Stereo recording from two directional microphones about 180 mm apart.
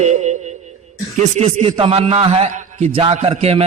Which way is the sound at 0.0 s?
40° right (ahead or behind).